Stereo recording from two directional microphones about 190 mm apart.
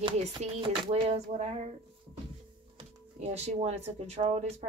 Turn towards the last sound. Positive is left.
turn(degrees=-35)  # may be behind; listen again after turning